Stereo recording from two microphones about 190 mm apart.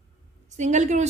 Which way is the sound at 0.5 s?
40° right (ahead or behind).